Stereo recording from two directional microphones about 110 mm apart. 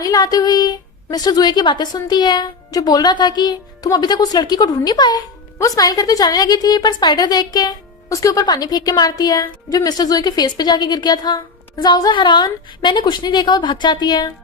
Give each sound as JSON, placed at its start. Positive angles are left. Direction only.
{"t": 0.0, "sound": "a woman's voice", "side_deg": 35}